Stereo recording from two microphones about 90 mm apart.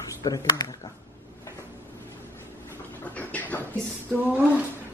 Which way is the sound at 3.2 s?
20° left (ahead or behind).